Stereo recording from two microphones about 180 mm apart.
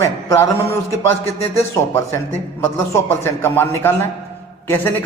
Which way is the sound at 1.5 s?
15° left (ahead or behind).